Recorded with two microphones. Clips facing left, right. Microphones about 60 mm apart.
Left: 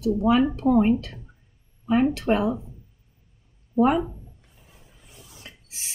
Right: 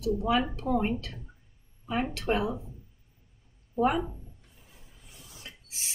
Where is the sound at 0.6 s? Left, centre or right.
Left.